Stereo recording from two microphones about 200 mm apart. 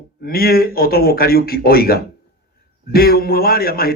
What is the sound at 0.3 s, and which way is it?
A man's voice, 50° left (ahead or behind).